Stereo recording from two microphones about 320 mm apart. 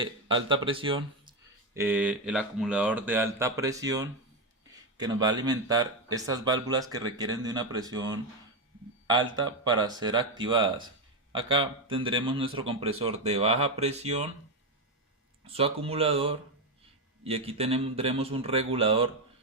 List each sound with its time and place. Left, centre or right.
0.4 s speech: centre
9.6 s speech: centre
15.4 s speech: centre